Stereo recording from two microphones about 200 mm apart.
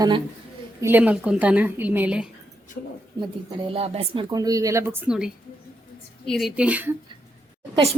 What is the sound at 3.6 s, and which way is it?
Speech, 30° right (ahead or behind).